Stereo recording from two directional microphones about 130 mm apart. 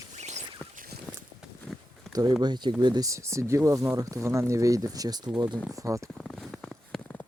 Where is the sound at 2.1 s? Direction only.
30° right (ahead or behind).